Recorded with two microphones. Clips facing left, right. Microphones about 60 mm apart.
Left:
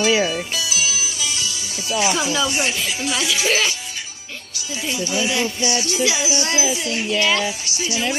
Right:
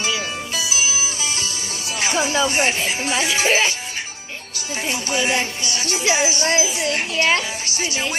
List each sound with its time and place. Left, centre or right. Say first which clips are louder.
0.0 s music: left 7 dB; left
0.7 s speech: right 1 dB; right
4.8 s music: even; right